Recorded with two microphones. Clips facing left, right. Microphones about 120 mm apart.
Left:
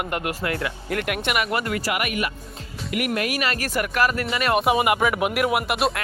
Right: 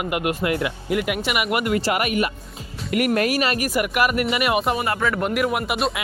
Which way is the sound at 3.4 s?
25° right (ahead or behind).